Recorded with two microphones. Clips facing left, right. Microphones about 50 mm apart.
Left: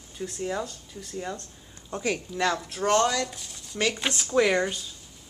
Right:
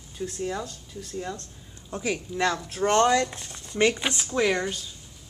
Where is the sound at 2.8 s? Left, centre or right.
Right.